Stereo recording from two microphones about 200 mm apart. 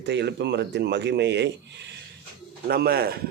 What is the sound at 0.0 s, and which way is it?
Speech, 60° right (ahead or behind).